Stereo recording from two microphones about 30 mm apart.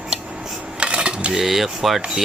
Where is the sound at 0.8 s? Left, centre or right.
Right.